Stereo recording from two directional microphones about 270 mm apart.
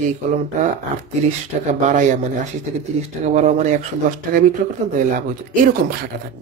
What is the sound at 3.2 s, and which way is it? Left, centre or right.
Speech, right.